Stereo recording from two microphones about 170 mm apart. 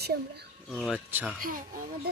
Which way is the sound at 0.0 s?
70° right (ahead or behind).